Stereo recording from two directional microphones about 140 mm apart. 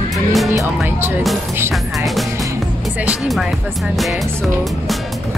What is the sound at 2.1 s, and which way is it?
Music, centre (ahead or behind).